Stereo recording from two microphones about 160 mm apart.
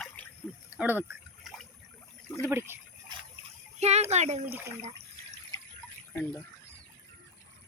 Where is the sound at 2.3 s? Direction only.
20° left (ahead or behind).